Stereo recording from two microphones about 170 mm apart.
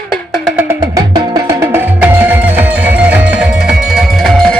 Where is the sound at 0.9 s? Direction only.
20° right (ahead or behind).